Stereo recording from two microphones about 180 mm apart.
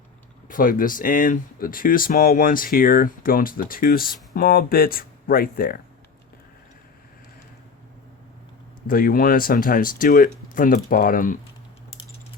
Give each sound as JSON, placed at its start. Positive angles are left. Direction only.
{"t": 0.4, "sound": "speech", "side_deg": 50}
{"t": 8.9, "sound": "speech", "side_deg": 50}